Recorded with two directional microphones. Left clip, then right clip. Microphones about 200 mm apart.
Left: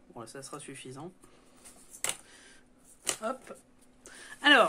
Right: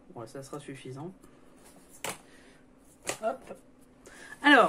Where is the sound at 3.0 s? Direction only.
30° left (ahead or behind).